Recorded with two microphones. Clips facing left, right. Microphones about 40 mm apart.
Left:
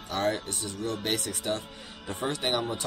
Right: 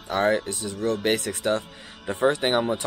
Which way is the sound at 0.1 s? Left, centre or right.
Right.